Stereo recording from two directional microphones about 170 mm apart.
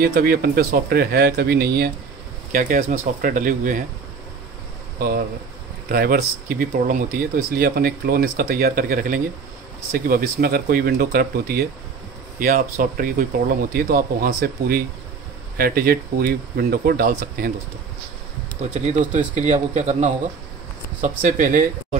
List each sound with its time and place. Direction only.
0.0 s speech: 60° right (ahead or behind)
2.5 s speech: 55° right (ahead or behind)
5.9 s speech: 60° right (ahead or behind)
18.7 s speech: 40° right (ahead or behind)
21.2 s speech: 50° right (ahead or behind)